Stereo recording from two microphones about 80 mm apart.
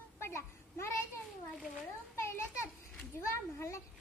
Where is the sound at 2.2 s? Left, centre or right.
Left.